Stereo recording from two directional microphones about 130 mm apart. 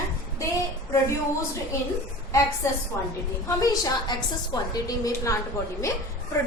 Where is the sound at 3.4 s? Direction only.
30° left (ahead or behind).